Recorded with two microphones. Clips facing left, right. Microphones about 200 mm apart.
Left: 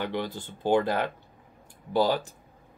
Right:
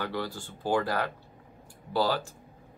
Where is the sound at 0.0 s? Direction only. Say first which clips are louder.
Left 2 dB; 20° left (ahead or behind).